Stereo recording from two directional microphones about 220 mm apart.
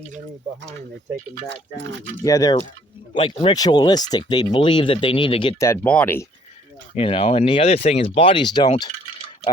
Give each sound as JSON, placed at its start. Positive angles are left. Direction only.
{"t": 2.2, "sound": "speech", "side_deg": 15}
{"t": 6.9, "sound": "speech", "side_deg": 25}